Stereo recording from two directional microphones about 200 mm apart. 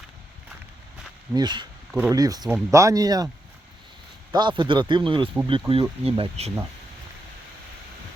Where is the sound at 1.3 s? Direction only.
20° right (ahead or behind).